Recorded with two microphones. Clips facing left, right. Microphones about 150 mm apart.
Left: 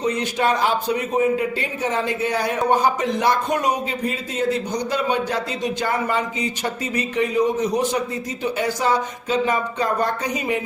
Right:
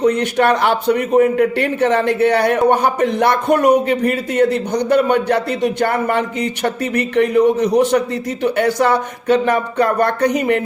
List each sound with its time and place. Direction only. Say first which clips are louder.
0.0 s a man's voice: right 7 dB; 65° right (ahead or behind)